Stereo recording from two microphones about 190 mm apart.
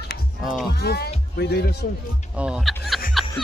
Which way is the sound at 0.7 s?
55° left (ahead or behind).